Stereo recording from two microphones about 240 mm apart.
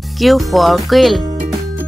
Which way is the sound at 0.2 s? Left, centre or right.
Centre.